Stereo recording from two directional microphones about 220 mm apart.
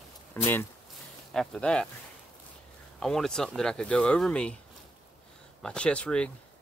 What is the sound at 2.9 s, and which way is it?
Speech, centre (ahead or behind).